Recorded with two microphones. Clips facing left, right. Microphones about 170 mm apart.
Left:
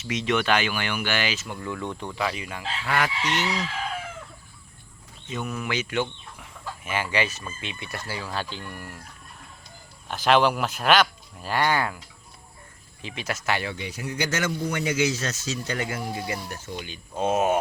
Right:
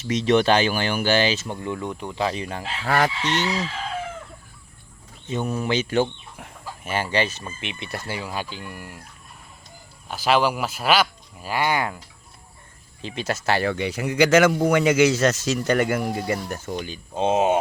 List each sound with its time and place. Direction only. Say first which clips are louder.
0.0 s speech: right 6 dB; 35° right (ahead or behind)
1.8 s speech: right 2 dB; 10° right (ahead or behind)
2.1 s speech: right 6 dB; 30° right (ahead or behind)
5.3 s speech: right 6 dB; 30° right (ahead or behind)
6.4 s chicken: right 1 dB; 40° right (ahead or behind)
7.4 s speech: right 3 dB; 20° right (ahead or behind)
10.1 s speech: even; 5° right (ahead or behind)
13.0 s speech: right 5 dB; 30° right (ahead or behind)
13.7 s speech: right 8 dB; 70° right (ahead or behind); by 16.9 s 50° right (ahead or behind)
16.9 s speech: right 3 dB; 30° right (ahead or behind)